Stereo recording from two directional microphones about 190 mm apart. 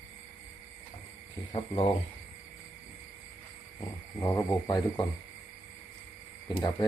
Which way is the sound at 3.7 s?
15° left (ahead or behind).